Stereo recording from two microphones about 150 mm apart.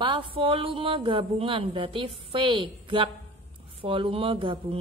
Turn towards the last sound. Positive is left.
turn(degrees=-35)  # may be behind; listen again after turning